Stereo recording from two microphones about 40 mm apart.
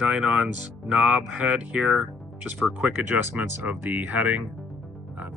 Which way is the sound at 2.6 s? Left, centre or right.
Right.